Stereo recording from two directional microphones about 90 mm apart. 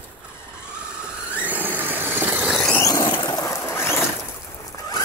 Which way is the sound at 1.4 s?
20° right (ahead or behind).